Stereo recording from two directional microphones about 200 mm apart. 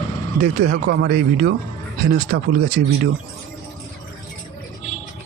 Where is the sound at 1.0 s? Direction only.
50° right (ahead or behind).